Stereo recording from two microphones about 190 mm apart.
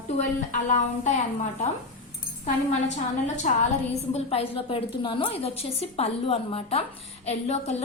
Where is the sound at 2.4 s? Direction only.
35° left (ahead or behind).